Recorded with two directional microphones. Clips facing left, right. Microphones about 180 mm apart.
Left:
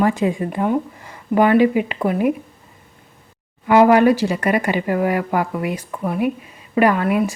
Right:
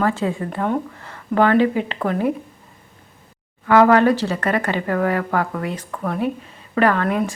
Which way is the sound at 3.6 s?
15° left (ahead or behind).